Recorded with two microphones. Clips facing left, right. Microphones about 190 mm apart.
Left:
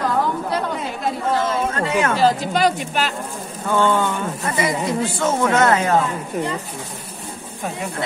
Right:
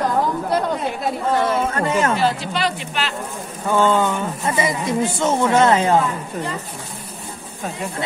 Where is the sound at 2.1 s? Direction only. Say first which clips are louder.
Left 3 dB; 40° left (ahead or behind).